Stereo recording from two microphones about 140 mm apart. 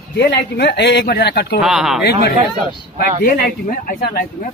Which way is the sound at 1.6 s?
5° right (ahead or behind).